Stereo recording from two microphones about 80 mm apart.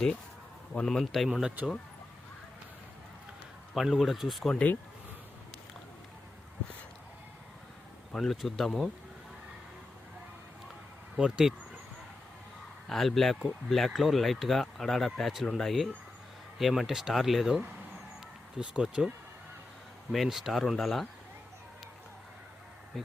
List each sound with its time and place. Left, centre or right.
0.7 s speech: centre
3.8 s speech: centre
8.1 s speech: centre
11.2 s speech: centre
12.9 s speech: centre
22.9 s speech: centre